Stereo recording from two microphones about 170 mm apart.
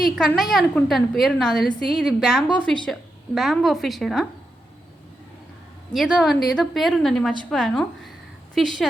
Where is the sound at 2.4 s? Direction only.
25° left (ahead or behind).